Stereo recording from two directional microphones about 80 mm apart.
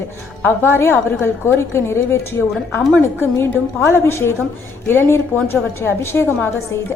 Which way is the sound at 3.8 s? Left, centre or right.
Left.